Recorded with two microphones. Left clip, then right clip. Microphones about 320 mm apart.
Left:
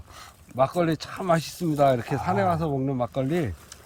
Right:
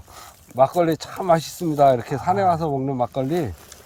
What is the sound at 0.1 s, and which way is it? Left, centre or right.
Speech, centre.